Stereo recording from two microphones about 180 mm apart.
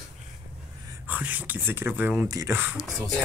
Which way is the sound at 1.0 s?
10° right (ahead or behind).